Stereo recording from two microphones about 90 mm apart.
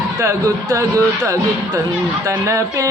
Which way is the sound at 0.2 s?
35° right (ahead or behind).